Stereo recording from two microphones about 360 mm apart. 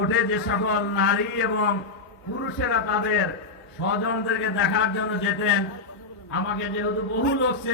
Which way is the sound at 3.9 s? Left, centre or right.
Left.